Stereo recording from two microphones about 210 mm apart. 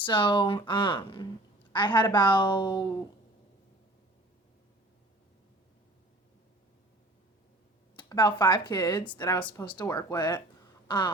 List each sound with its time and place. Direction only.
0.0 s speech: 25° left (ahead or behind)
7.9 s speech: 20° left (ahead or behind)
10.8 s a sound: 20° left (ahead or behind)